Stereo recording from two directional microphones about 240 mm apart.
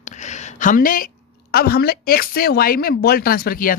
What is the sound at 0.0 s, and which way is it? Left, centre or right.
A woman's voice, left.